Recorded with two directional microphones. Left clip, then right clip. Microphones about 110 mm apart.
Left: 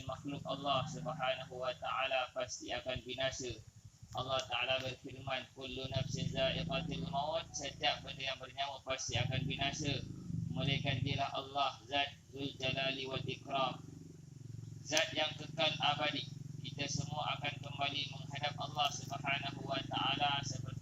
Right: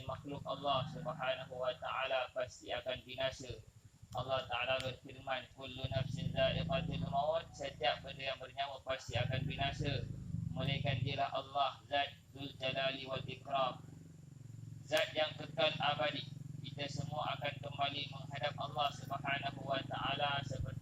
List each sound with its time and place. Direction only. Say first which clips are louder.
0.1 s a man's voice: left 1 dB; 25° right (ahead or behind)
14.8 s speech: even; 15° right (ahead or behind)